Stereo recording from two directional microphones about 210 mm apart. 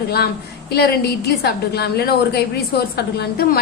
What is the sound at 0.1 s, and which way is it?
A woman's voice, 50° left (ahead or behind).